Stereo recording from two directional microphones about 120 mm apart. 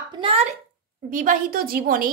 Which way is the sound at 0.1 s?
45° right (ahead or behind).